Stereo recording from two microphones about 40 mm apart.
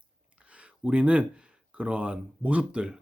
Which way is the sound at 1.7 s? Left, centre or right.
Right.